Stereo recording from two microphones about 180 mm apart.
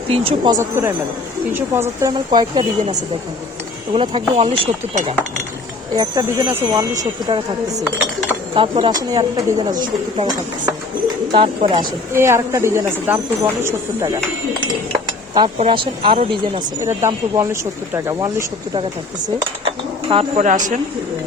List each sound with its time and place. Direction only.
0.1 s speech: 25° right (ahead or behind)
6.0 s speech: 20° right (ahead or behind)
8.5 s speech: 30° right (ahead or behind)
11.3 s speech: 30° right (ahead or behind)
12.1 s speech: 15° right (ahead or behind)
15.5 s speech: 30° right (ahead or behind)
16.8 s speech: 15° right (ahead or behind)
19.6 s bird: 30° right (ahead or behind)
20.4 s speech: 45° right (ahead or behind)